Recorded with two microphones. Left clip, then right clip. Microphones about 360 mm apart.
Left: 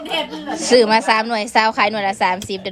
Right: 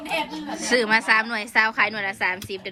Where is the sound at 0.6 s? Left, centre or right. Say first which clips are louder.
Left 6 dB; centre.